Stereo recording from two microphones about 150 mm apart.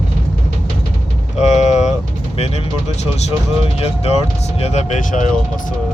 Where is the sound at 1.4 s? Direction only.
50° left (ahead or behind).